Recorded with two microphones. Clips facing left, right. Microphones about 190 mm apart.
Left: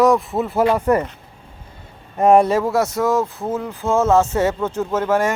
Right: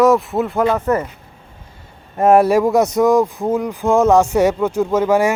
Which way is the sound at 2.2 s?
5° right (ahead or behind).